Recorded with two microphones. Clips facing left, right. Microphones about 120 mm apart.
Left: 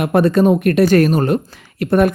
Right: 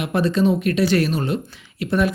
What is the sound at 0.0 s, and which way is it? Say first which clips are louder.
Speech: left 6 dB; 55° left (ahead or behind).